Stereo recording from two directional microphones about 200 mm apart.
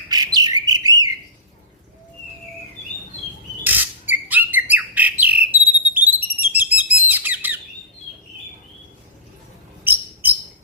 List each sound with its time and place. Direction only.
0.1 s bird: 20° right (ahead or behind)
3.6 s bird: 10° right (ahead or behind)
9.8 s a sound: 10° right (ahead or behind)